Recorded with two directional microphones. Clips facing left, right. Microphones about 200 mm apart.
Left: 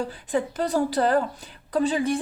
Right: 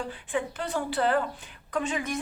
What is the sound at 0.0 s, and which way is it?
A woman's voice, 40° left (ahead or behind).